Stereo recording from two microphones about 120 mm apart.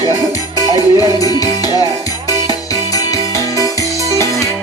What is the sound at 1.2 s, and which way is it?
Music, 30° left (ahead or behind).